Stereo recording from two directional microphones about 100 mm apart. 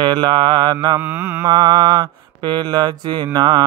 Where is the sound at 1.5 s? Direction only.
50° right (ahead or behind).